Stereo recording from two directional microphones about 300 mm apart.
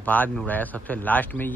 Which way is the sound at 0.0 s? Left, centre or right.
Centre.